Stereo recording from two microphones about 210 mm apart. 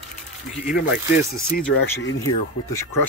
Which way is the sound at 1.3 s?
45° left (ahead or behind).